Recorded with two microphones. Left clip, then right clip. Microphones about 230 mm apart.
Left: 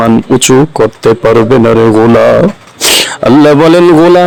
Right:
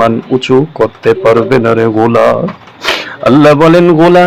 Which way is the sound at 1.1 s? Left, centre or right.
Left.